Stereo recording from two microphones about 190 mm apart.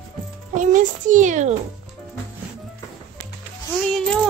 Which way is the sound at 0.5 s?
45° right (ahead or behind).